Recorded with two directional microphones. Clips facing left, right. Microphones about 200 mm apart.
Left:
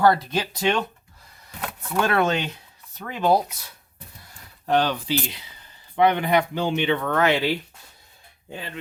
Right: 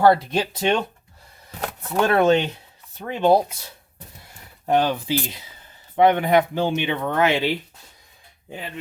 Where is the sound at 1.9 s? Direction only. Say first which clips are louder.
Right 5 dB; 25° right (ahead or behind).